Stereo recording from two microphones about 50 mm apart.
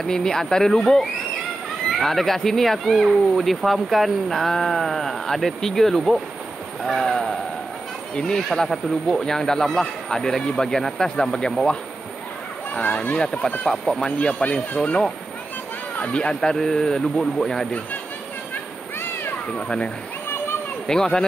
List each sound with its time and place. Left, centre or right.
0.0 s speech: centre
12.8 s speech: left
13.2 s speech: centre
14.0 s speech: left
16.0 s speech: left; by 17.6 s centre
19.5 s speech: left
20.8 s speech: centre